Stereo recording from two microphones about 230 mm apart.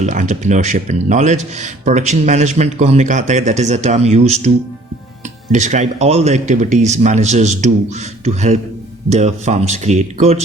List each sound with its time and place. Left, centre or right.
0.0 s speech: right